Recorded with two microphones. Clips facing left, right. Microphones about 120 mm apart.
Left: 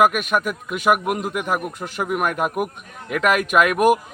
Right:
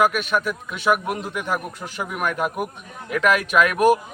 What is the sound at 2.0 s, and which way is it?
Speech, 50° left (ahead or behind).